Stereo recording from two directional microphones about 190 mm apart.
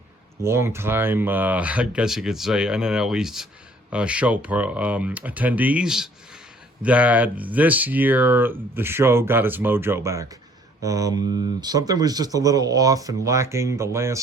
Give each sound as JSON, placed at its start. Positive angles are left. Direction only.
{"t": 0.4, "sound": "speech", "side_deg": -15}